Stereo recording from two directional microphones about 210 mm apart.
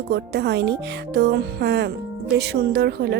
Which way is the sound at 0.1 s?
50° right (ahead or behind).